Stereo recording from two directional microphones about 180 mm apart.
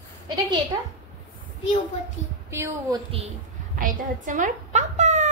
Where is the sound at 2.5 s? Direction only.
15° right (ahead or behind).